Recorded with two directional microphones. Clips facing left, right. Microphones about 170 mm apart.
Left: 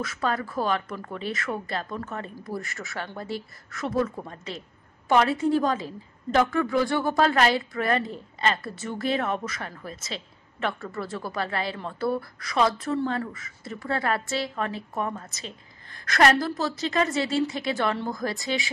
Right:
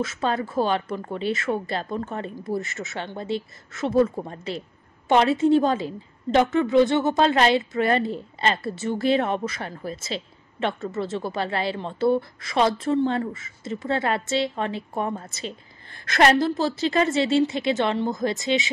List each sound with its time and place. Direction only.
0.0 s speech: 25° right (ahead or behind)